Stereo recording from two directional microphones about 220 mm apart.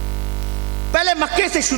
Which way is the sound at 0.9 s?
10° right (ahead or behind).